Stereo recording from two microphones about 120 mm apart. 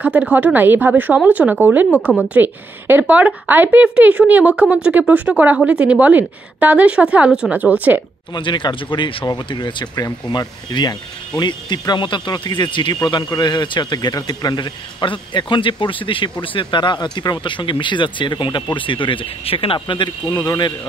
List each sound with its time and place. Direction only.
0.0 s a woman's voice: 10° right (ahead or behind)
8.3 s speech: 40° left (ahead or behind)